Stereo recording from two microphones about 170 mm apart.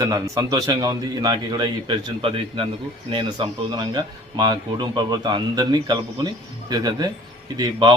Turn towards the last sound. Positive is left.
turn(degrees=-25)  # may be behind; listen again after turning